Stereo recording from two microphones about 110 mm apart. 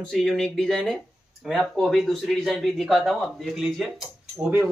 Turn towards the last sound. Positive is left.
turn(degrees=-20)  # may be behind; listen again after turning